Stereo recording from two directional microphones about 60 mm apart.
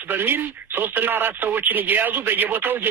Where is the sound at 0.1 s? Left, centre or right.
Right.